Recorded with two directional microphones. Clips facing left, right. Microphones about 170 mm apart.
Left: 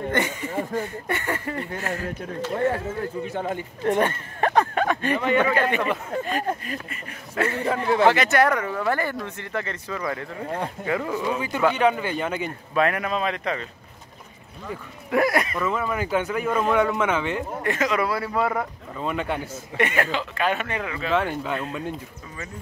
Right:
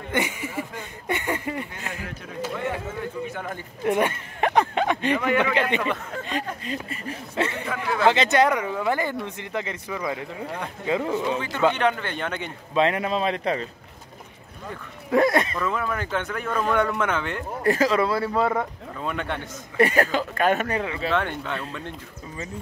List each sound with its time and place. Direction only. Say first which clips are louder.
0.1 s speech: right 1 dB; 10° right (ahead or behind)
3.3 s speech: left 5 dB; 30° left (ahead or behind)
3.8 s speech: even; 10° right (ahead or behind)
6.6 s speech: right 3 dB; 25° right (ahead or behind)
7.5 s speech: left 5 dB; 35° left (ahead or behind)
8.1 s speech: even; 20° right (ahead or behind)
11.2 s a man's voice: left 2 dB; 10° left (ahead or behind)
12.7 s speech: right 1 dB; 25° right (ahead or behind)
15.0 s speech: right 2 dB; 25° right (ahead or behind)
15.5 s speech: left 1 dB; 5° left (ahead or behind)
17.6 s speech: right 4 dB; 30° right (ahead or behind)
18.6 s speech: even; 5° left (ahead or behind)
19.8 s speech: right 4 dB; 40° right (ahead or behind)
21.1 s speech: left 4 dB; 5° left (ahead or behind)